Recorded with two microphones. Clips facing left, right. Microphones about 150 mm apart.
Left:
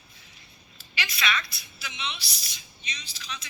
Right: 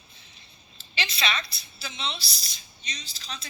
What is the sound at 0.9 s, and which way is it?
A woman's voice, 25° right (ahead or behind).